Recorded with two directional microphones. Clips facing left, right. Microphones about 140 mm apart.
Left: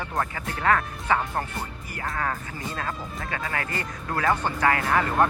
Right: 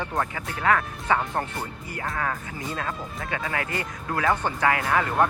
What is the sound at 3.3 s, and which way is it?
Speech, 20° right (ahead or behind).